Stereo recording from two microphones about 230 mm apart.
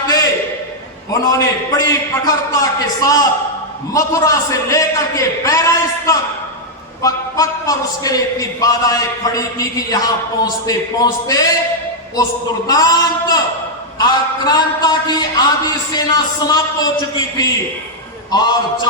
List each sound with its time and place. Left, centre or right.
1.1 s a man's voice: centre
12.6 s a man's voice: centre